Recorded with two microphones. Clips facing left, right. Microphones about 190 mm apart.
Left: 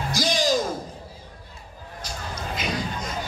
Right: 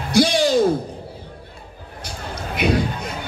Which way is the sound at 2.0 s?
65° right (ahead or behind).